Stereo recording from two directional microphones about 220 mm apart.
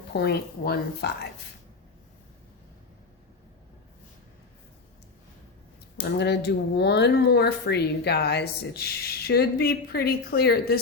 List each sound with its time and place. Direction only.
0.1 s speech: 45° left (ahead or behind)
6.0 s speech: 50° left (ahead or behind)